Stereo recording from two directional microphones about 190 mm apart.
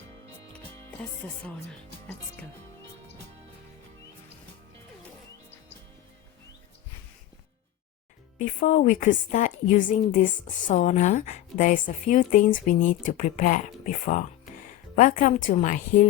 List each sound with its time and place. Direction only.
1.2 s speech: 10° left (ahead or behind)
8.4 s a woman's voice: 40° left (ahead or behind)